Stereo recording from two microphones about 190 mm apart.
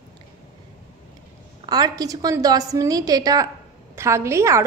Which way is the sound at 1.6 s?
20° right (ahead or behind).